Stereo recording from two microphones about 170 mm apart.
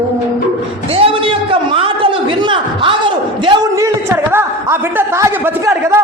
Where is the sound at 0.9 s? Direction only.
35° right (ahead or behind).